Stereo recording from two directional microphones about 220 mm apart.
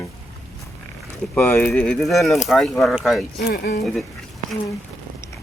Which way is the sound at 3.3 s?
45° left (ahead or behind).